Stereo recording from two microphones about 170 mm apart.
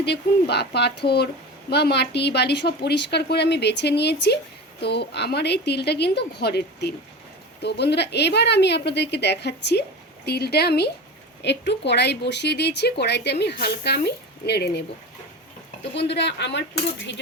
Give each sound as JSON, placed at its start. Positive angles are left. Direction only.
{"t": 0.0, "sound": "a woman's voice", "side_deg": 80}
{"t": 11.4, "sound": "a woman's voice", "side_deg": 90}
{"t": 16.0, "sound": "speech", "side_deg": 85}